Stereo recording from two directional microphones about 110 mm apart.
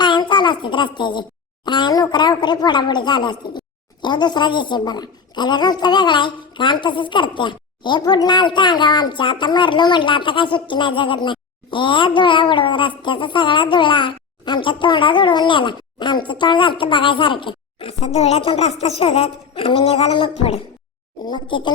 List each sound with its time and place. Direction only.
0.0 s a sound: 45° left (ahead or behind)
1.6 s a woman's voice: 45° left (ahead or behind); by 20.6 s 60° left (ahead or behind)
21.2 s a woman's voice: 45° left (ahead or behind)